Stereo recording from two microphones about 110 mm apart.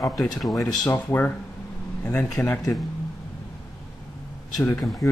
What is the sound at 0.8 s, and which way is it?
Speech, 20° left (ahead or behind).